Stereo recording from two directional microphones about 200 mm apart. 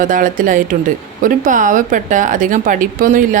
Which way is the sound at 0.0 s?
40° right (ahead or behind).